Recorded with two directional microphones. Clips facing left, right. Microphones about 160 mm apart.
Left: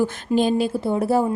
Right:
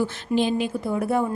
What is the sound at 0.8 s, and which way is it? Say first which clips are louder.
Speech: left 3 dB; 30° left (ahead or behind).